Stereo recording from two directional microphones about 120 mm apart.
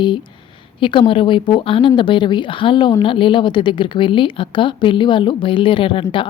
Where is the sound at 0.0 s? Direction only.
40° left (ahead or behind).